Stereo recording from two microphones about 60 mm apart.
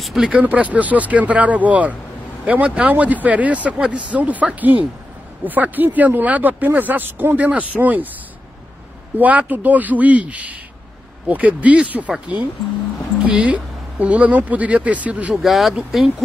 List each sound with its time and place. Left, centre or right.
0.0 s speech: centre
0.3 s speech: right
9.2 s speech: right
13.2 s speech: right
15.3 s speech: centre